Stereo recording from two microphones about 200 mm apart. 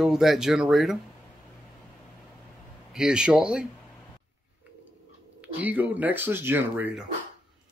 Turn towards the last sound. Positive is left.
turn(degrees=-10)  # may be behind; listen again after turning